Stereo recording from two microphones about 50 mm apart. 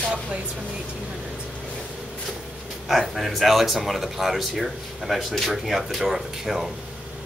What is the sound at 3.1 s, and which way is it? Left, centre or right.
Speech, centre.